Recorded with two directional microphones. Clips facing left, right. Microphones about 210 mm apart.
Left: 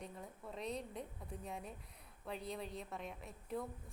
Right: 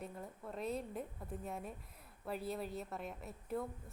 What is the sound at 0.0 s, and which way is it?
A woman's voice, centre (ahead or behind).